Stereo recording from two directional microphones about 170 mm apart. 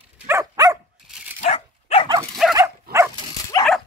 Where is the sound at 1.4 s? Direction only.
40° left (ahead or behind).